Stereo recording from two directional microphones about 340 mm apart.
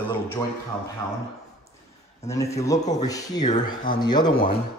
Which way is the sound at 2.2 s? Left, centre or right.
Centre.